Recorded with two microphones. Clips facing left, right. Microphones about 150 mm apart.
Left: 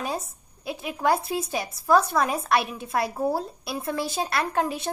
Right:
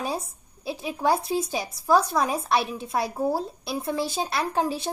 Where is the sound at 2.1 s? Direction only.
10° right (ahead or behind).